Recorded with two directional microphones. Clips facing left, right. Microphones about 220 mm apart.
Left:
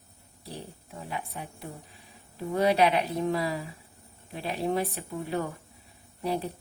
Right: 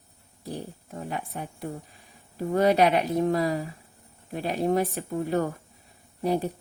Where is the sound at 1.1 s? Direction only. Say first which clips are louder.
Right 1 dB; 45° right (ahead or behind).